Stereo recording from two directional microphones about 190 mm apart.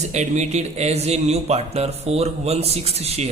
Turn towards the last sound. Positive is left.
turn(degrees=-35)  # may be behind; listen again after turning